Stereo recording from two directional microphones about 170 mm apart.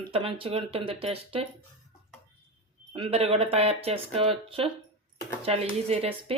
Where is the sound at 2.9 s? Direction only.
35° right (ahead or behind).